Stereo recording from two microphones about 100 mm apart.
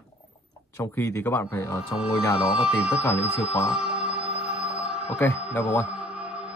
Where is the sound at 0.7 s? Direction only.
30° left (ahead or behind).